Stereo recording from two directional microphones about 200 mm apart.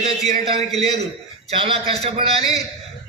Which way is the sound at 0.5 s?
30° right (ahead or behind).